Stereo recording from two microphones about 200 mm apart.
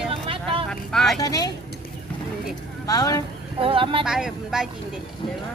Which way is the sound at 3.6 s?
25° right (ahead or behind).